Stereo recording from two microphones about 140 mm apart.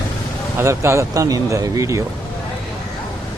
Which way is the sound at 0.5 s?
20° right (ahead or behind).